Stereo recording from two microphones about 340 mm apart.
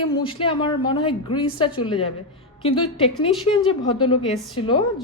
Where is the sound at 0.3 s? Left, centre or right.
Centre.